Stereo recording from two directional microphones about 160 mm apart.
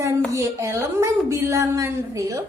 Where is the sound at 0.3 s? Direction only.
20° right (ahead or behind).